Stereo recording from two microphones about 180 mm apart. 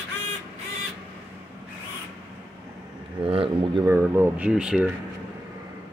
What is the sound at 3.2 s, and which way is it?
Speech, 30° right (ahead or behind).